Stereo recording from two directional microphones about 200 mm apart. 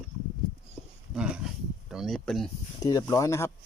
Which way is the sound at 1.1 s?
5° right (ahead or behind).